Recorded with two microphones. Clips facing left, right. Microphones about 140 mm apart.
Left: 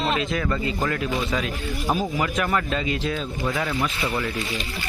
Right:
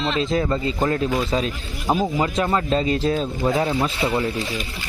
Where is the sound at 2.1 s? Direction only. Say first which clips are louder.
Right 3 dB; 25° right (ahead or behind).